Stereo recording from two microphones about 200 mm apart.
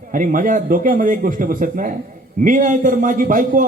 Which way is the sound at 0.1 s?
40° right (ahead or behind).